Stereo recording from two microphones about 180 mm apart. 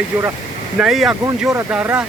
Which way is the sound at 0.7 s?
5° right (ahead or behind).